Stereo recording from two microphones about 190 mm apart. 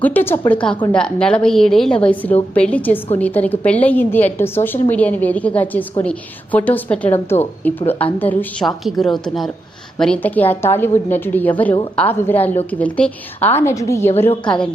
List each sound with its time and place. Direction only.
0.0 s a woman's voice: 10° left (ahead or behind)